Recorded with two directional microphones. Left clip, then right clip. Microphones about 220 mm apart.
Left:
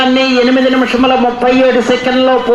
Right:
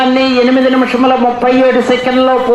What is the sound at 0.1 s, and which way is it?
A man's voice, 25° left (ahead or behind).